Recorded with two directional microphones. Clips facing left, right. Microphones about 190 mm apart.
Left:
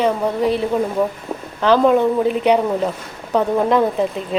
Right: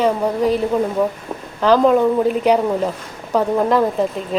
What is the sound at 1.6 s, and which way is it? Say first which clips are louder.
Speech: right 1 dB; centre (ahead or behind).